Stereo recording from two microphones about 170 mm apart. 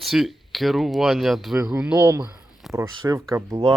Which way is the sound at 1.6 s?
20° right (ahead or behind).